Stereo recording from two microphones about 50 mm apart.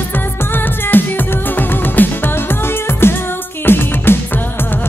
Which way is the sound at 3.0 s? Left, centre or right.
Left.